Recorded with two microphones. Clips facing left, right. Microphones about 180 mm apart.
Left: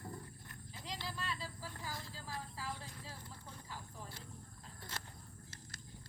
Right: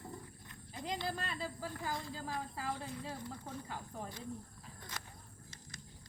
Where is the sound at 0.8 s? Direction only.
55° right (ahead or behind).